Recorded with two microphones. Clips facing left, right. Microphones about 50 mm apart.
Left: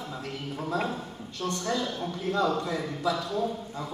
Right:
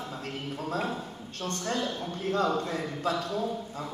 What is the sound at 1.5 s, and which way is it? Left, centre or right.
A man's voice, right.